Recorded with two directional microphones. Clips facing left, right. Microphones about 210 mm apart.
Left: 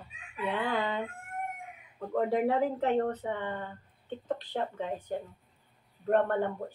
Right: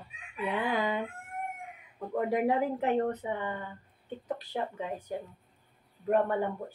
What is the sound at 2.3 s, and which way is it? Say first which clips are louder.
Speech: right 1 dB; 15° right (ahead or behind).